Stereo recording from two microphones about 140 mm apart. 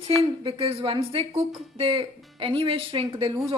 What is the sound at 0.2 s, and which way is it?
Speech, 40° right (ahead or behind).